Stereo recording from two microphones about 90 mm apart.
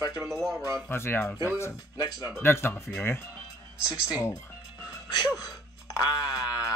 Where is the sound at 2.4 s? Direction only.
25° left (ahead or behind).